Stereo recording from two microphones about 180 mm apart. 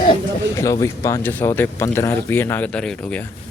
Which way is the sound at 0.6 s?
15° left (ahead or behind).